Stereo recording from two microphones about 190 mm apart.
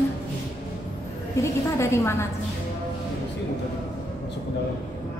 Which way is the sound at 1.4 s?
15° left (ahead or behind).